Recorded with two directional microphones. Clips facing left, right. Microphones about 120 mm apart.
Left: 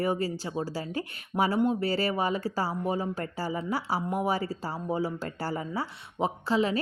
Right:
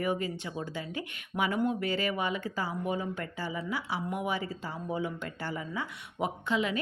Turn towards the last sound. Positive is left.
turn(degrees=35)  # may be behind; listen again after turning